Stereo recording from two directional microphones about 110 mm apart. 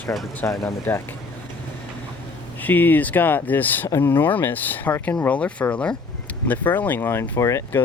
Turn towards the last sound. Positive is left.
turn(degrees=25)  # may be behind; listen again after turning